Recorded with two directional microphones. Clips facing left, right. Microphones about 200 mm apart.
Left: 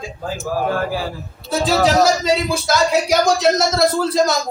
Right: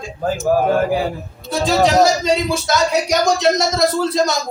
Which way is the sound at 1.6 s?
Centre (ahead or behind).